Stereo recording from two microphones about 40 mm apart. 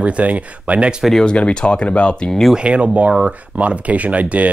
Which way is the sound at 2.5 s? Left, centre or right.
Right.